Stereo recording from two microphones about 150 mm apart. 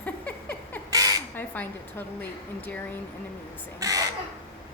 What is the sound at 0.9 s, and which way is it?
Crow, 25° right (ahead or behind).